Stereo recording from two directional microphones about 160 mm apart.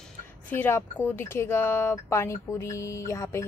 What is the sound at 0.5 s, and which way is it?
A woman's voice, 15° left (ahead or behind).